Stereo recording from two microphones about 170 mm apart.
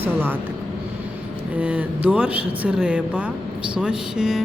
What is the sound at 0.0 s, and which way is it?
Speech, 10° right (ahead or behind).